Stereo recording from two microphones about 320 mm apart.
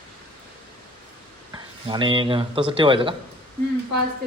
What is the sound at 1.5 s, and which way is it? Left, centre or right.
Speech, centre.